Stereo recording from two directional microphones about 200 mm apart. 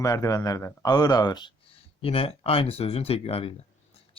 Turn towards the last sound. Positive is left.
turn(degrees=30)  # may be behind; listen again after turning